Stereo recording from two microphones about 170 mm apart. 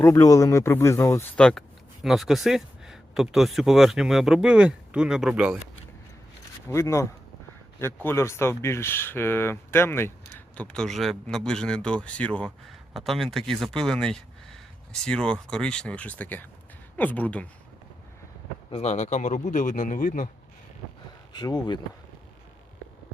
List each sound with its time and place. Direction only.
0.0 s speech: 20° left (ahead or behind)
1.4 s speech: 5° left (ahead or behind)
6.7 s speech: 15° left (ahead or behind)
18.7 s speech: 40° left (ahead or behind)
21.3 s speech: 25° left (ahead or behind)